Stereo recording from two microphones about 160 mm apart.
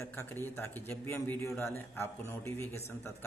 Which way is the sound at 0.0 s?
15° left (ahead or behind).